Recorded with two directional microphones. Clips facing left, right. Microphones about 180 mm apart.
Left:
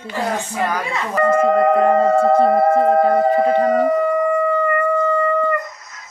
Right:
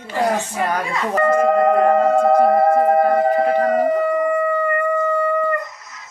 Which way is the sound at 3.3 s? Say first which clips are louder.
Left 1 dB; 25° left (ahead or behind).